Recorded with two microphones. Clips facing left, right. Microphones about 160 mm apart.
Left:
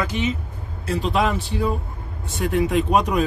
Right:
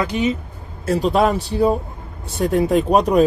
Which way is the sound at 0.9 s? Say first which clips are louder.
Right 5 dB; 40° right (ahead or behind).